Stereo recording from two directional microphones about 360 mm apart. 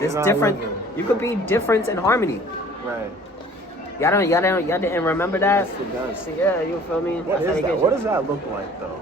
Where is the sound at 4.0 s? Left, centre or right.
Centre.